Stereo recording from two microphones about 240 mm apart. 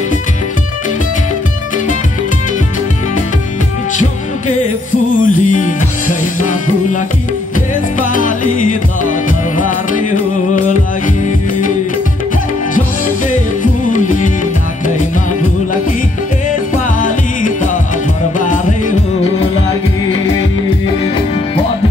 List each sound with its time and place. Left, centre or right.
5.1 s music: left
8.0 s music: left
13.8 s music: left
18.4 s music: left